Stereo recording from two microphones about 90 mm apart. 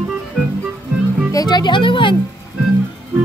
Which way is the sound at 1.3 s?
45° left (ahead or behind).